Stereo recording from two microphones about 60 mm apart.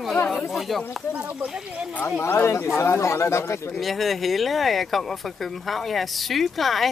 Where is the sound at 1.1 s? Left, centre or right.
Right.